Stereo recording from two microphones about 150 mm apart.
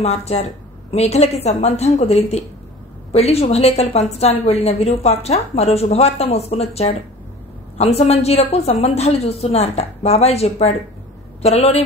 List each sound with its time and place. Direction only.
0.0 s a woman's voice: 45° left (ahead or behind)